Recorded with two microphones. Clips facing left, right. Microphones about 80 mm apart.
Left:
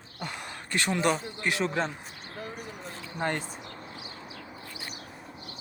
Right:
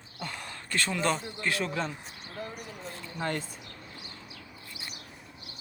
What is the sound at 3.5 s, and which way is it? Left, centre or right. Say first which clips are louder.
Speech: left 5 dB; left.